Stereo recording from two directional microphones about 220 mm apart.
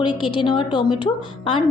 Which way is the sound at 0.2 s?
25° left (ahead or behind).